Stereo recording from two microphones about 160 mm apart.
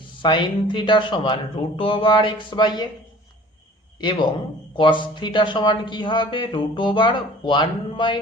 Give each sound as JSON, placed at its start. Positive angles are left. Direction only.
{"t": 0.2, "sound": "speech", "side_deg": 30}
{"t": 4.0, "sound": "speech", "side_deg": 30}